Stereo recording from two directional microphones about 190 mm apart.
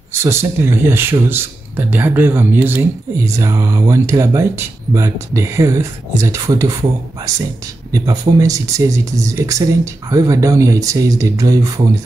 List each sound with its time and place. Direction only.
0.1 s speech: 15° right (ahead or behind)
7.9 s speech: 20° right (ahead or behind)